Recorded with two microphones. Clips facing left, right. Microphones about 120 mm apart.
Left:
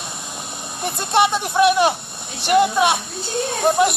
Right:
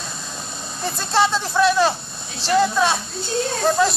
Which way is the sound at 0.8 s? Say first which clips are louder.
Left 2 dB; 15° left (ahead or behind).